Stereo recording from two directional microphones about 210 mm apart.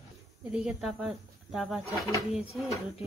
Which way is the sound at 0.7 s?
Centre (ahead or behind).